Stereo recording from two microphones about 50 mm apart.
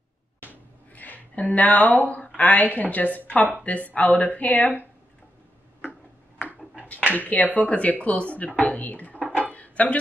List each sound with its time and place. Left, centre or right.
0.4 s a sound: left
0.9 s speech: left
7.1 s speech: left
9.5 s dishes: left